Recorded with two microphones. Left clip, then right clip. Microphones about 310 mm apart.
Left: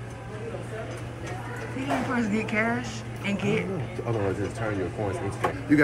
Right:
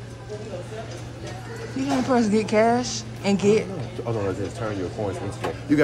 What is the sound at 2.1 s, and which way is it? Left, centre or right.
A woman's voice, centre.